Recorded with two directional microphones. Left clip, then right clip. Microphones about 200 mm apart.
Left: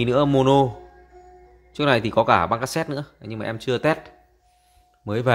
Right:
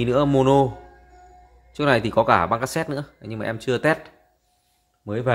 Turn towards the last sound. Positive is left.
turn(degrees=20)  # may be behind; listen again after turning